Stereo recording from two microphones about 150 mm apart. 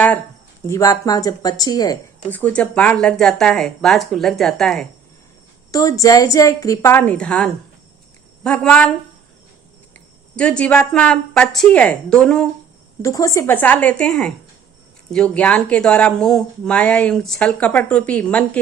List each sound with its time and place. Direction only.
0.7 s a woman's voice: 20° left (ahead or behind)
2.3 s speech: 10° left (ahead or behind)
5.7 s a woman's voice: 25° left (ahead or behind); by 8.9 s 5° left (ahead or behind)
9.9 s speech: 10° left (ahead or behind)
13.0 s speech: 20° left (ahead or behind)